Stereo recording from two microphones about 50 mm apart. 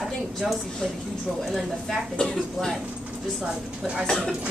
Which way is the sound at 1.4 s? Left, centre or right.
Centre.